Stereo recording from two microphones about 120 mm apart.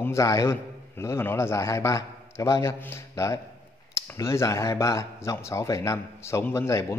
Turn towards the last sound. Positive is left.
turn(degrees=25)  # may be behind; listen again after turning